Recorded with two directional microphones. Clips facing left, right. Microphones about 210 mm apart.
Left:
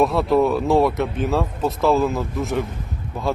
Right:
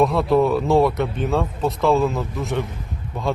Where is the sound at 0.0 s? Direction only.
Centre (ahead or behind).